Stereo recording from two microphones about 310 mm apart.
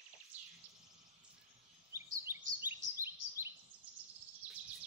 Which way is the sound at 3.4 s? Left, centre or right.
Centre.